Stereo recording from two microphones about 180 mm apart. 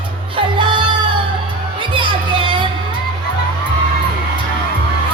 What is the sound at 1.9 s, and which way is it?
Music, 25° right (ahead or behind).